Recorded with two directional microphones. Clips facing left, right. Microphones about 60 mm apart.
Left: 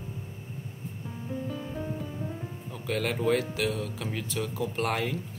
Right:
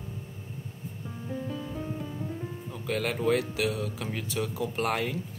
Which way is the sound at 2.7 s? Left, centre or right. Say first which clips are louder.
Left 1 dB; centre.